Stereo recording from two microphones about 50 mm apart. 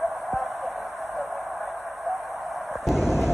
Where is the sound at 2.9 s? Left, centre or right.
Left.